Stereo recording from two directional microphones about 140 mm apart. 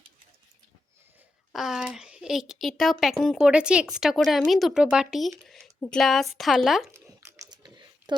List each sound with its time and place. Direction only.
1.5 s speech: centre (ahead or behind)
6.9 s crumpling: 20° right (ahead or behind)